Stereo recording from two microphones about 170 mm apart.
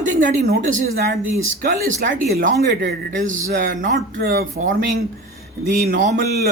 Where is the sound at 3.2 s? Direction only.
50° right (ahead or behind).